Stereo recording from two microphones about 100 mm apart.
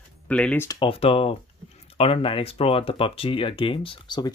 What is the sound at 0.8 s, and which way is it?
Speech, 70° left (ahead or behind).